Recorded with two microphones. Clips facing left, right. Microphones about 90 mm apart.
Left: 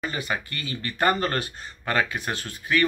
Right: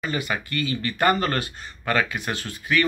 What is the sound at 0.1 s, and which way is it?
Speech, 30° left (ahead or behind).